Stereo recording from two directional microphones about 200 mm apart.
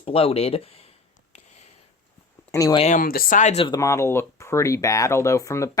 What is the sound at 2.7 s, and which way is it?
Speech, 35° left (ahead or behind).